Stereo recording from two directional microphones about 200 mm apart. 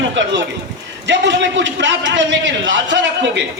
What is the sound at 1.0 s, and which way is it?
A man's voice, 65° right (ahead or behind).